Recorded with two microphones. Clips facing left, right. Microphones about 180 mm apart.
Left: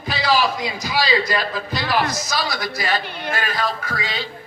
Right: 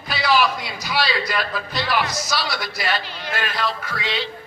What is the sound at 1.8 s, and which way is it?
A man's voice, 45° left (ahead or behind).